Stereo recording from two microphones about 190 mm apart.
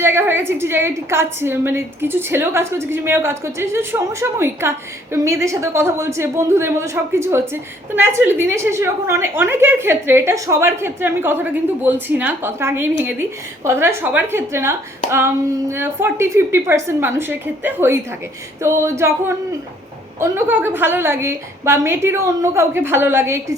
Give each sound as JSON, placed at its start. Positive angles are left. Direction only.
{"t": 0.0, "sound": "a woman's voice", "side_deg": -10}
{"t": 20.1, "sound": "a woman's voice", "side_deg": -10}